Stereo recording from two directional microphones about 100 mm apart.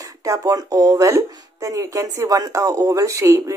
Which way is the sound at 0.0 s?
35° right (ahead or behind).